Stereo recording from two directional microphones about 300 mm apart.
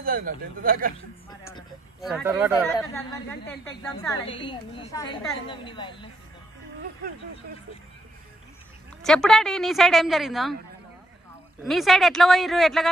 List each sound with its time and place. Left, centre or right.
0.0 s speech: right
0.9 s a woman's voice: centre
2.0 s a woman's voice: centre
2.9 s a woman's voice: centre
9.0 s a woman's voice: centre
11.6 s a woman's voice: centre